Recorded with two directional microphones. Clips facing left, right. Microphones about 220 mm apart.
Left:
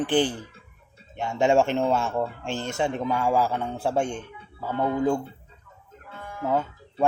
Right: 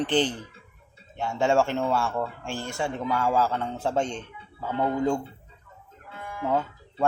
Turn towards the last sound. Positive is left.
turn(degrees=10)  # may be behind; listen again after turning